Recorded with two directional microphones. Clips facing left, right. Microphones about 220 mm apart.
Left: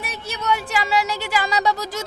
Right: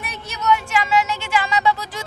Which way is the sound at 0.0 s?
30° left (ahead or behind).